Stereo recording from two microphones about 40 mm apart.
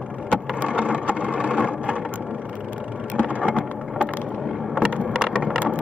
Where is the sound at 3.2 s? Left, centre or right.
Right.